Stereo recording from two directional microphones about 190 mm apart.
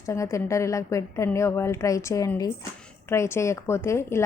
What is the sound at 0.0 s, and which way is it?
A woman's voice, 15° left (ahead or behind).